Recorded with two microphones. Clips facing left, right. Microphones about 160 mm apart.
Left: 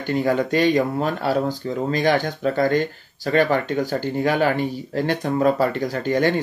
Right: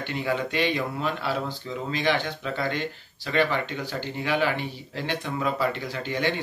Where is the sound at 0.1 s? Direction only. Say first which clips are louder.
Left 9 dB; 45° left (ahead or behind).